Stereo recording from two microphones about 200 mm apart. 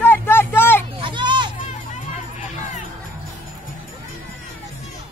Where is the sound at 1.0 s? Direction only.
25° right (ahead or behind).